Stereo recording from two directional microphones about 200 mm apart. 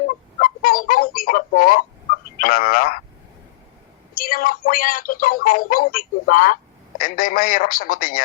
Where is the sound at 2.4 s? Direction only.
45° left (ahead or behind).